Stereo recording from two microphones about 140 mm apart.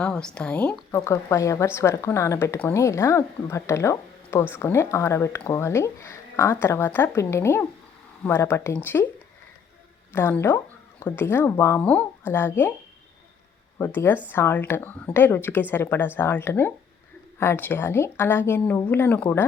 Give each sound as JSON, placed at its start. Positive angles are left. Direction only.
{"t": 0.0, "sound": "speech", "side_deg": 5}
{"t": 0.9, "sound": "speech", "side_deg": 20}
{"t": 10.1, "sound": "speech", "side_deg": 15}
{"t": 13.7, "sound": "speech", "side_deg": 15}